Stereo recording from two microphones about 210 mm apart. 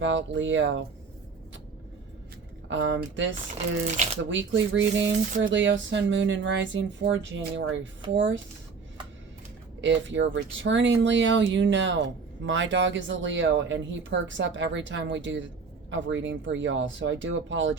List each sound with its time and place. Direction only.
0.0 s speech: 60° right (ahead or behind)
2.6 s speech: 60° right (ahead or behind)
3.9 s speech: 35° right (ahead or behind)
4.3 s speech: 60° right (ahead or behind)
9.8 s speech: 60° right (ahead or behind)